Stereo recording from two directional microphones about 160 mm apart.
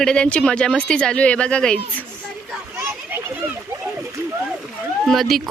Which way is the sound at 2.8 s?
15° right (ahead or behind).